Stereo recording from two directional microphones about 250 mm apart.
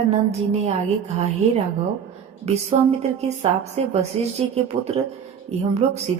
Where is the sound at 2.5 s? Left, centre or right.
Right.